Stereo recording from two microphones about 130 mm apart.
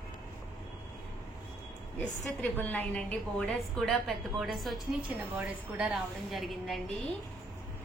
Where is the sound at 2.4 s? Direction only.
15° left (ahead or behind).